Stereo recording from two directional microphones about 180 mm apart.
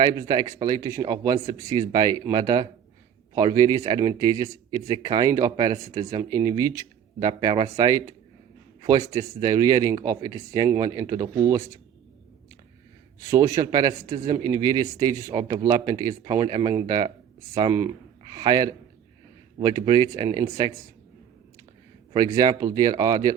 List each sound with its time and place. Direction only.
0.0 s speech: 20° right (ahead or behind)
13.1 s speech: 15° right (ahead or behind)
22.4 s speech: 20° right (ahead or behind)